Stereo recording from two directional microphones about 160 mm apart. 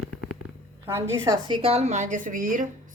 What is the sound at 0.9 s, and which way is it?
Speech, 15° right (ahead or behind).